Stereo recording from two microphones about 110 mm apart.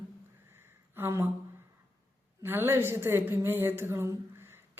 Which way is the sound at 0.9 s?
20° right (ahead or behind).